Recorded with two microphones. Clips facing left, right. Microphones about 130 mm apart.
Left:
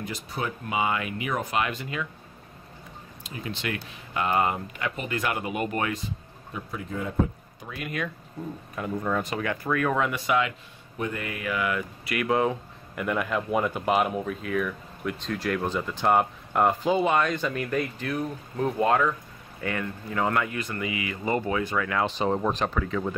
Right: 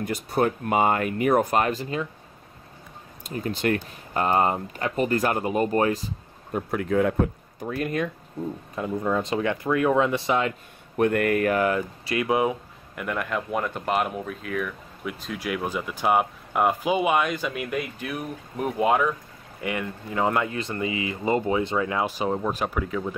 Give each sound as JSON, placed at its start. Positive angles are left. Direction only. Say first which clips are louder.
{"t": 0.0, "sound": "speech", "louder": "right 8 dB", "side_deg": -55}
{"t": 3.3, "sound": "speech", "louder": "right 8 dB", "side_deg": -45}
{"t": 6.5, "sound": "speech", "louder": "right 10 dB", "side_deg": -65}
{"t": 7.6, "sound": "speech", "louder": "right 6 dB", "side_deg": -35}
{"t": 9.0, "sound": "speech", "louder": "right 4 dB", "side_deg": -20}
{"t": 11.0, "sound": "speech", "louder": "right 11 dB", "side_deg": -60}
{"t": 12.2, "sound": "speech", "louder": "right 1 dB", "side_deg": -15}
{"t": 12.9, "sound": "speech", "louder": "left 1 dB", "side_deg": 0}
{"t": 22.0, "sound": "speech", "louder": "even", "side_deg": -10}